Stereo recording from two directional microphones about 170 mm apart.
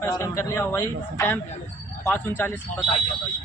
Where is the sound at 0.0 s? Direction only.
15° left (ahead or behind).